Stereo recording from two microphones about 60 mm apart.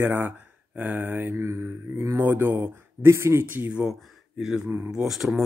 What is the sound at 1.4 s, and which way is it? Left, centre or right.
Speech, right.